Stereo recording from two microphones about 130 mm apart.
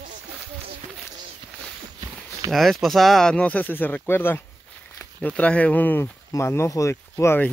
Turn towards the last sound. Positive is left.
turn(degrees=20)  # may be behind; listen again after turning